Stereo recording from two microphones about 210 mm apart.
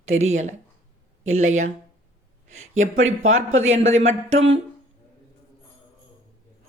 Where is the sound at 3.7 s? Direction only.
30° right (ahead or behind).